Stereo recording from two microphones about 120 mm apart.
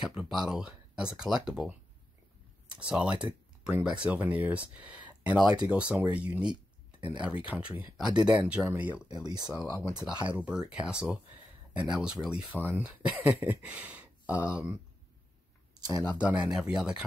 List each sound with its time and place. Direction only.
0.0 s speech: 5° right (ahead or behind)
2.8 s speech: 10° right (ahead or behind)
9.1 s speech: 35° right (ahead or behind)
10.2 s speech: 10° right (ahead or behind)
14.3 s speech: 25° left (ahead or behind)
16.0 s speech: 10° right (ahead or behind)